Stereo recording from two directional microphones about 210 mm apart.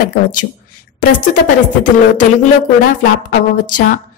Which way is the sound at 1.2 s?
40° left (ahead or behind).